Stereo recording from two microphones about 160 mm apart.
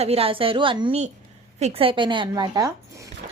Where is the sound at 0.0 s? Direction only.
40° right (ahead or behind); by 3.1 s 20° right (ahead or behind).